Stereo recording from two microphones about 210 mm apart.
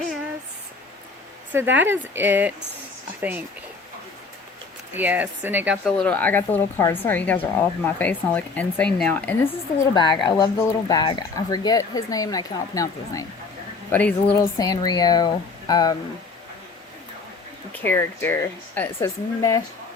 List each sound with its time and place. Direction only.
1.5 s speech: 10° right (ahead or behind)
4.9 s speech: 10° right (ahead or behind)
9.9 s a woman's voice: 20° left (ahead or behind)
17.7 s speech: 10° left (ahead or behind)